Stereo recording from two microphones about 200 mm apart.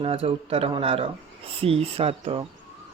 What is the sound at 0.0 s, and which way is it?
Speech, 30° right (ahead or behind).